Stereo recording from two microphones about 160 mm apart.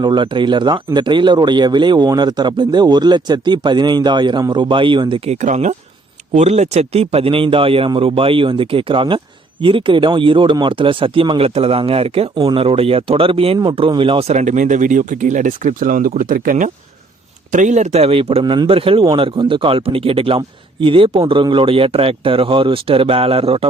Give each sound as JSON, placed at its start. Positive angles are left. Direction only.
{"t": 0.0, "sound": "speech", "side_deg": -30}